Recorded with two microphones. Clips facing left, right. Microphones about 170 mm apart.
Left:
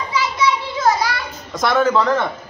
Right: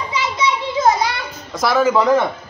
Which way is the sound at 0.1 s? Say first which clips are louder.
Left 2 dB; 20° right (ahead or behind).